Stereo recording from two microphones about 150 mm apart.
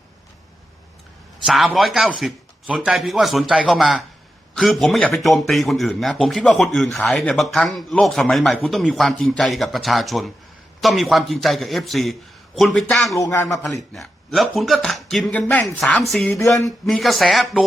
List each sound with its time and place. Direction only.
1.5 s speech: centre (ahead or behind)
13.1 s speech: 20° left (ahead or behind)
13.7 s speech: centre (ahead or behind)